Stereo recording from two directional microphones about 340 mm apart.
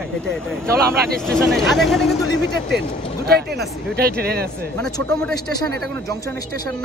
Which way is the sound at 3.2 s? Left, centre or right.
Right.